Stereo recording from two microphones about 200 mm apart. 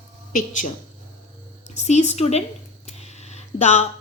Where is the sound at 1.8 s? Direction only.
35° left (ahead or behind).